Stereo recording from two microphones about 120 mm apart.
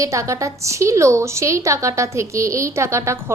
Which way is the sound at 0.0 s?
25° right (ahead or behind).